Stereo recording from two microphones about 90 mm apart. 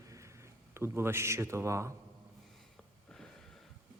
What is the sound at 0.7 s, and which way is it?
Speech, 30° right (ahead or behind).